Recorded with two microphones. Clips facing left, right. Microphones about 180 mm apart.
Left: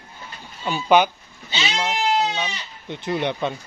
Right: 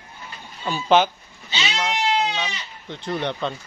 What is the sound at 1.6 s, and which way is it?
Goat, 10° left (ahead or behind).